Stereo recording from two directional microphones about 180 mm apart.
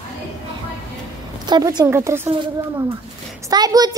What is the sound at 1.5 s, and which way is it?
A woman's voice, 25° right (ahead or behind).